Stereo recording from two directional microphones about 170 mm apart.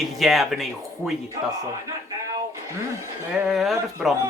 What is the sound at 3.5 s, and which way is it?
Speech, centre (ahead or behind).